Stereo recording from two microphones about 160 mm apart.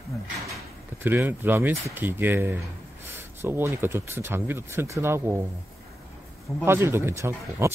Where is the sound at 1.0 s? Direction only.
10° right (ahead or behind).